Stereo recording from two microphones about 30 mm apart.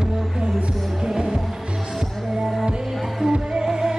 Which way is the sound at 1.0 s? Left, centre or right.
Centre.